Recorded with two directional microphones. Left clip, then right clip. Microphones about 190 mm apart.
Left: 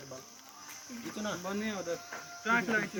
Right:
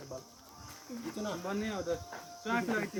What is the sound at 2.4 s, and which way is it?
Speech, 35° left (ahead or behind).